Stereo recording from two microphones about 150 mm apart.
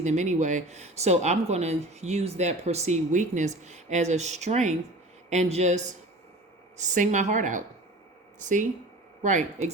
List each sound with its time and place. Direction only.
0.0 s a woman's voice: 50° right (ahead or behind)